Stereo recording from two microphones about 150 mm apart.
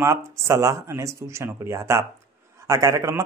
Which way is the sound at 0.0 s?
20° right (ahead or behind).